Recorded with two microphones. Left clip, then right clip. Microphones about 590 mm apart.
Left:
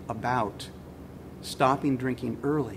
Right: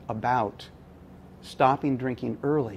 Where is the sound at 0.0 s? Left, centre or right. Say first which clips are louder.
Right 3 dB; right.